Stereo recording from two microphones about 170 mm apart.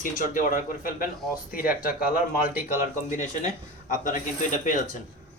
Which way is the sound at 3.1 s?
45° left (ahead or behind).